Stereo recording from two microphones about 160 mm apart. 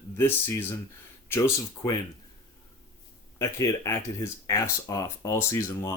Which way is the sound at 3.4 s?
20° left (ahead or behind).